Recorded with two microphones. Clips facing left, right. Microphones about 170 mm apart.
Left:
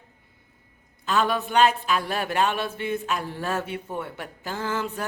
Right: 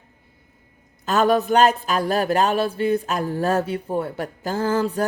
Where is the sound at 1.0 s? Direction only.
45° right (ahead or behind).